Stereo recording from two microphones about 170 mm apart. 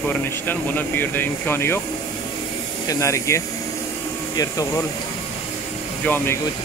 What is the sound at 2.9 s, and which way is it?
Speech, 15° left (ahead or behind).